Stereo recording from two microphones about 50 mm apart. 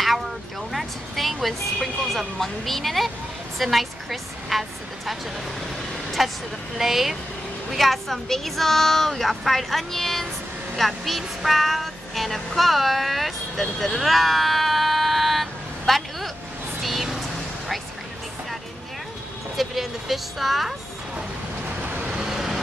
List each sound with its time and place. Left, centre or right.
0.7 s a woman's voice: centre
6.2 s a woman's voice: centre
16.8 s vehicle: centre
19.5 s a woman's voice: centre
22.2 s vehicle: centre